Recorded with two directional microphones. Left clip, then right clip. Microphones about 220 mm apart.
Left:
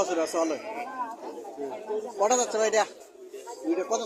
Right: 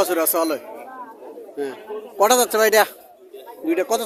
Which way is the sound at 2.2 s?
55° right (ahead or behind).